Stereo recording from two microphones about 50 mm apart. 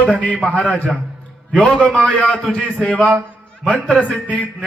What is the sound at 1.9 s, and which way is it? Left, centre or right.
Speech, centre.